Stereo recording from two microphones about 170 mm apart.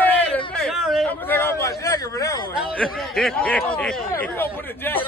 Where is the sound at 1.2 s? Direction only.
15° left (ahead or behind).